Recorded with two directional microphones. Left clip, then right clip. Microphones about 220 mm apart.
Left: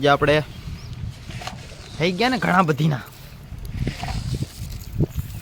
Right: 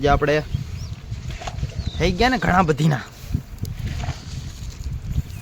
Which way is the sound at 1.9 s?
Centre (ahead or behind).